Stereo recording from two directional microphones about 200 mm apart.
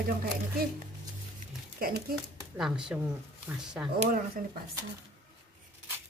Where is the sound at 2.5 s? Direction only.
5° right (ahead or behind).